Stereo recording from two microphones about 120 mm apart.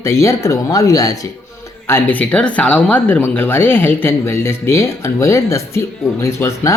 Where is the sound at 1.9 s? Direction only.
15° left (ahead or behind).